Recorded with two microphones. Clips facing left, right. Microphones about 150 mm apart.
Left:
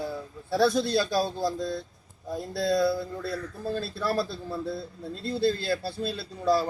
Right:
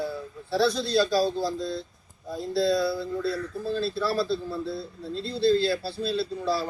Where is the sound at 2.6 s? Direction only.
50° left (ahead or behind).